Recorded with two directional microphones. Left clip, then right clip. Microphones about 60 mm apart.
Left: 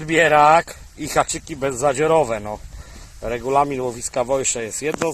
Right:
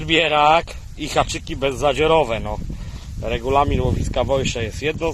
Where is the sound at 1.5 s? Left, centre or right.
Centre.